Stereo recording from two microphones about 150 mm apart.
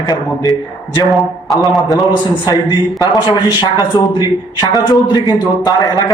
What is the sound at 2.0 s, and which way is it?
A man's voice, 30° left (ahead or behind).